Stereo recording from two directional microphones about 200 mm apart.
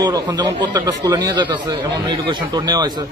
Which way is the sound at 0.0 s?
20° right (ahead or behind).